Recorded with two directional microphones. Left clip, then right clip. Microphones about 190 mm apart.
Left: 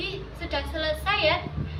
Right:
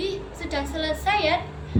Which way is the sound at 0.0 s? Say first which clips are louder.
Right 4 dB; 15° right (ahead or behind).